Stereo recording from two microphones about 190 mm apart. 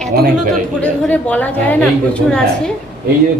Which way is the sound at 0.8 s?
10° left (ahead or behind).